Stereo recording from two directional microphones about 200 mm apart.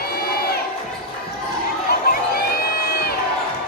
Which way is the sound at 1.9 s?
50° left (ahead or behind).